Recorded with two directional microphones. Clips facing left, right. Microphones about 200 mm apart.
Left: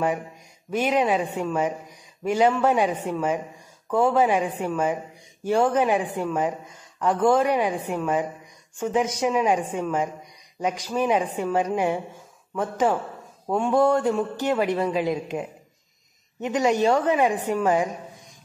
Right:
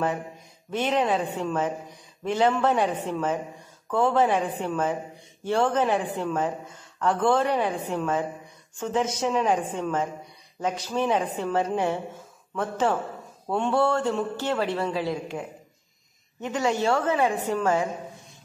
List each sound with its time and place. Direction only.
0.7 s a woman's voice: 10° left (ahead or behind)